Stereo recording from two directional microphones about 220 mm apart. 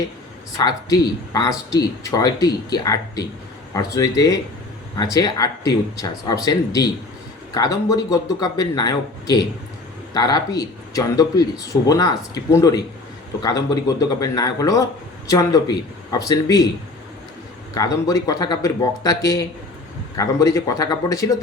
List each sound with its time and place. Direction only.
0.6 s speech: 15° left (ahead or behind)
17.7 s speech: 15° left (ahead or behind)